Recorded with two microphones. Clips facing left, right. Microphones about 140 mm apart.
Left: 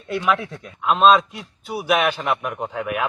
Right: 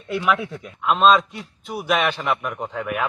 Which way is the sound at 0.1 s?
Centre (ahead or behind).